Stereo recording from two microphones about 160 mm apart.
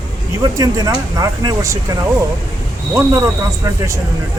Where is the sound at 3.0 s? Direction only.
20° right (ahead or behind).